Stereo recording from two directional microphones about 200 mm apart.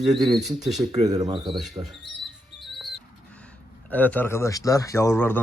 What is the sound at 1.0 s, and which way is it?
Speech, 20° right (ahead or behind).